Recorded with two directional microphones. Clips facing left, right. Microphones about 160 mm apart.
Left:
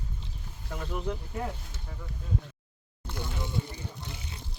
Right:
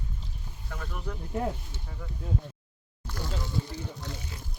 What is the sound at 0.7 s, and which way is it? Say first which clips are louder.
Speech: left 5 dB; 20° left (ahead or behind).